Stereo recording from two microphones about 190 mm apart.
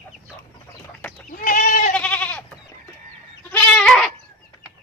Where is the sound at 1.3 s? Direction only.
45° left (ahead or behind).